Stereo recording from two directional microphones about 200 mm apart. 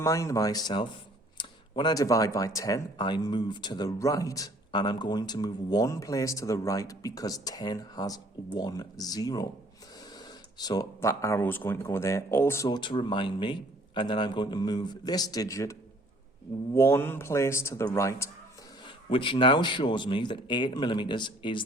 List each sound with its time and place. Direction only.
0.0 s speech: 15° left (ahead or behind)
19.1 s speech: 25° left (ahead or behind)